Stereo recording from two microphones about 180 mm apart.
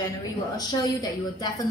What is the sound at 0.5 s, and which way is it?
Speech, 20° left (ahead or behind).